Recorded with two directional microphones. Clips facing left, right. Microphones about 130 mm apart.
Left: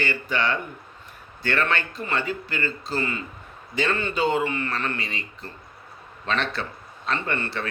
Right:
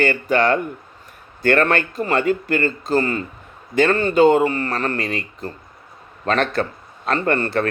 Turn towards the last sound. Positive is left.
turn(degrees=-45)  # may be behind; listen again after turning